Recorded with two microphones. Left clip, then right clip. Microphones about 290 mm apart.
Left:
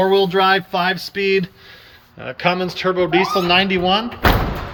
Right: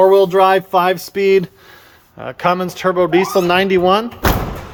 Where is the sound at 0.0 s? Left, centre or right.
Centre.